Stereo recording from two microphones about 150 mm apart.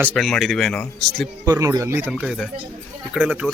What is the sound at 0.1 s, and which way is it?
Speech, centre (ahead or behind).